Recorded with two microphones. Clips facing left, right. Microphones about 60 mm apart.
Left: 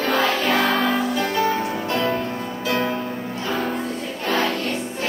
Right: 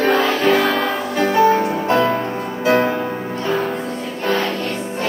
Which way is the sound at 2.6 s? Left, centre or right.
Right.